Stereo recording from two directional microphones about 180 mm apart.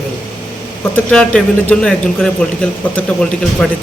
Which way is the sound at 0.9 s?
5° left (ahead or behind).